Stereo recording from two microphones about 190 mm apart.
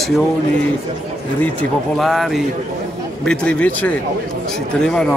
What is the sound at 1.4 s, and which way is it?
Speech, 5° left (ahead or behind).